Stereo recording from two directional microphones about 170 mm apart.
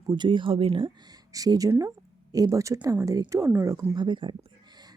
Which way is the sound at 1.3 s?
20° right (ahead or behind).